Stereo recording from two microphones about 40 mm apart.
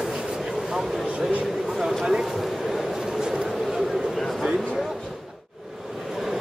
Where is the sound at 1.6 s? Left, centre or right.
Centre.